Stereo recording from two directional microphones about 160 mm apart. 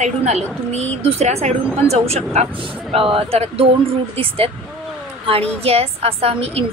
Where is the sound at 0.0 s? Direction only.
45° right (ahead or behind).